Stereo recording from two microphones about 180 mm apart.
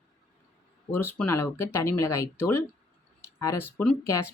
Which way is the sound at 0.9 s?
10° left (ahead or behind).